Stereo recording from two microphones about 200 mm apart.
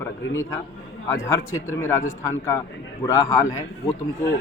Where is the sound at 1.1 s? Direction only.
15° left (ahead or behind).